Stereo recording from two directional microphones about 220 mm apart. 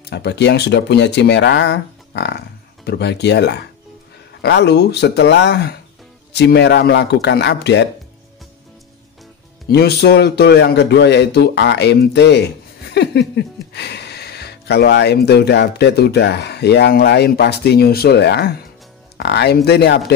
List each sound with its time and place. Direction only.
0.1 s speech: 50° left (ahead or behind)
9.7 s speech: 45° left (ahead or behind)
12.9 s a sound: 50° left (ahead or behind)
13.7 s speech: 50° left (ahead or behind)